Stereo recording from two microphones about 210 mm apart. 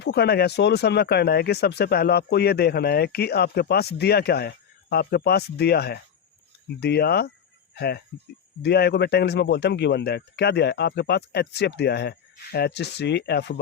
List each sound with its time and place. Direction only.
0.0 s speech: 50° left (ahead or behind)